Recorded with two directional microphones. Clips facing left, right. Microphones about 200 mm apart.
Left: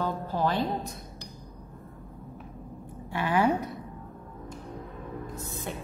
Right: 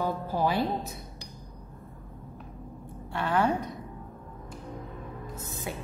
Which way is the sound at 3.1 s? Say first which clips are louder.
Left 1 dB; 10° left (ahead or behind).